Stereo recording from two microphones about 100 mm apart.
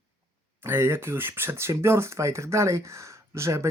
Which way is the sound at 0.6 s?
25° right (ahead or behind).